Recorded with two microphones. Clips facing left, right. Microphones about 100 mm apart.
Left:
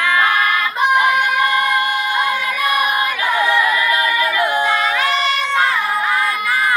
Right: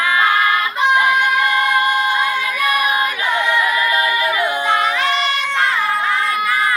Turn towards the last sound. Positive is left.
turn(degrees=-20)  # may be behind; listen again after turning